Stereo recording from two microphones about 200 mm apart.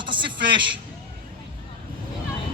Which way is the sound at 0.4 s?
25° right (ahead or behind).